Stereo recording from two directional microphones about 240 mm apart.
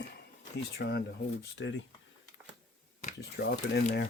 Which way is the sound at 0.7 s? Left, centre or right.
Left.